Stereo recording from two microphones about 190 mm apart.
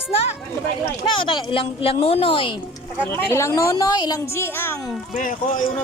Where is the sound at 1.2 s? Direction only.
25° left (ahead or behind).